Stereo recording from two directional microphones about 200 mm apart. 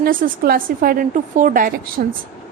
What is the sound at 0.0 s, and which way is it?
A woman's voice, 45° right (ahead or behind).